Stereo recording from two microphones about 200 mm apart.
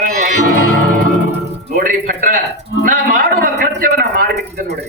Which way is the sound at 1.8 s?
45° right (ahead or behind).